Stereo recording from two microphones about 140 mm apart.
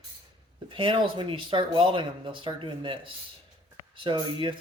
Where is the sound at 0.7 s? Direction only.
40° right (ahead or behind).